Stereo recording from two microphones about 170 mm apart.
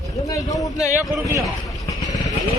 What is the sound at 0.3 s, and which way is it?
Speech, 20° left (ahead or behind).